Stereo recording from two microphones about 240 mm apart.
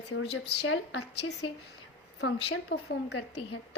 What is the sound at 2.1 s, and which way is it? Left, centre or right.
Speech, left.